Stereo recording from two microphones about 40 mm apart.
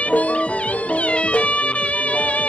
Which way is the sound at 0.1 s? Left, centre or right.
Left.